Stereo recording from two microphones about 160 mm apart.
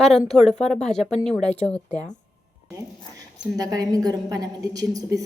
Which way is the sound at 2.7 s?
20° right (ahead or behind).